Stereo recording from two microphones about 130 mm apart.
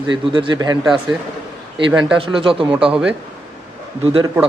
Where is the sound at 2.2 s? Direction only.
40° right (ahead or behind).